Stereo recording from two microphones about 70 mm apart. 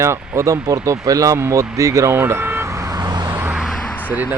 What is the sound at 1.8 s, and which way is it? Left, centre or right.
Speech, right.